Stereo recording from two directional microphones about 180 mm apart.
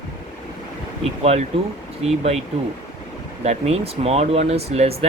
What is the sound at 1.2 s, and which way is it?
Speech, 35° right (ahead or behind).